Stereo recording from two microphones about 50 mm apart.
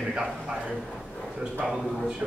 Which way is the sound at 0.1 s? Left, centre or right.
Centre.